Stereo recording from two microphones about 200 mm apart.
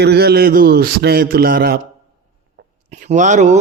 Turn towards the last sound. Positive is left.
turn(degrees=-35)  # may be behind; listen again after turning